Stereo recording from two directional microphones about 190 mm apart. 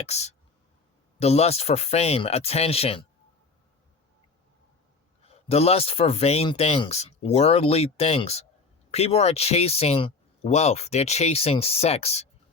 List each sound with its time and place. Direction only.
0.0 s speech: 35° left (ahead or behind)
5.2 s speech: 30° left (ahead or behind)